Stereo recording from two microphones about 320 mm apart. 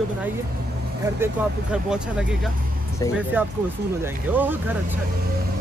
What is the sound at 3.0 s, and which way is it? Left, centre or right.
Speech, centre.